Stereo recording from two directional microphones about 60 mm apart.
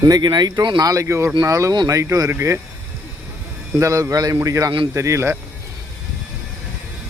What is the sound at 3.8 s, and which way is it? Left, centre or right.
Speech, right.